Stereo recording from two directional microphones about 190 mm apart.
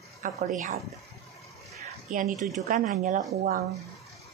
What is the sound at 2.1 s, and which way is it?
Speech, 45° right (ahead or behind).